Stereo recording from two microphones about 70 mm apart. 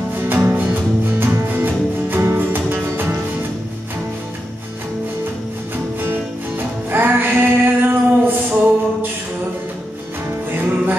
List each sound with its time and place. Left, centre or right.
0.1 s music: right
5.9 s music: right
10.5 s music: right